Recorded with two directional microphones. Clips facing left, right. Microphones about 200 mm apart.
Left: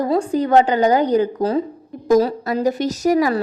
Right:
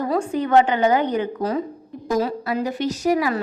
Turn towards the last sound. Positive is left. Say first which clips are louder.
# left 4 dB
turn(degrees=40)  # may be behind; listen again after turning